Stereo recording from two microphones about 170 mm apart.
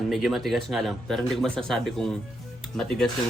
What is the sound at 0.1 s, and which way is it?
Speech, centre (ahead or behind).